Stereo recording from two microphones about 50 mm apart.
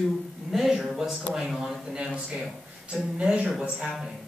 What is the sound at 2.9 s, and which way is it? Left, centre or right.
Speech, right.